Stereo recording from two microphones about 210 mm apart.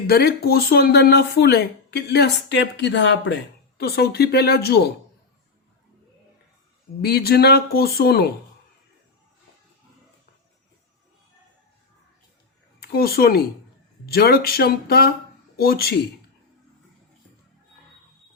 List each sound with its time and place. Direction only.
0.1 s speech: 50° left (ahead or behind)
3.8 s speech: 50° left (ahead or behind)
7.0 s speech: 50° left (ahead or behind)
12.8 s speech: 45° left (ahead or behind)